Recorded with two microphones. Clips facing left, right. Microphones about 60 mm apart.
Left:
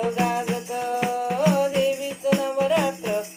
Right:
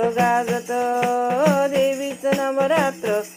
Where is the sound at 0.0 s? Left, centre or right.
Right.